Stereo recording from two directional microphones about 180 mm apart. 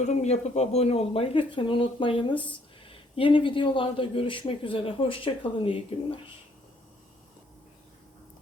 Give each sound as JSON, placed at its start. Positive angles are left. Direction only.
{"t": 0.0, "sound": "speech", "side_deg": 40}